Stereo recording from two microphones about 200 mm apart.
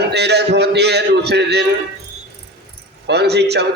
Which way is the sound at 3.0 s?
55° right (ahead or behind).